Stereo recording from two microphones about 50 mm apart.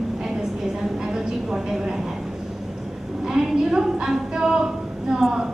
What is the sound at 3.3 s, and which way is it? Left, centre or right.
A woman's voice, centre.